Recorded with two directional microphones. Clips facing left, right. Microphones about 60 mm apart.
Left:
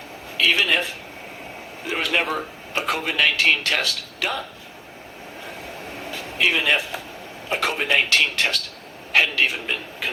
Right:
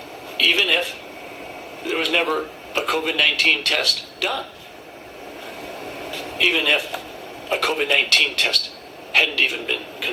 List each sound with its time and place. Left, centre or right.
0.3 s speech: left
6.1 s a sound: left
7.5 s speech: left